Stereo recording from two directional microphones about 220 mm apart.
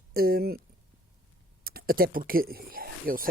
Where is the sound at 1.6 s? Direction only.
45° right (ahead or behind).